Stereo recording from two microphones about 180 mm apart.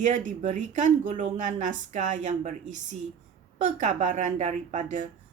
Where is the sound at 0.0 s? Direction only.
40° right (ahead or behind).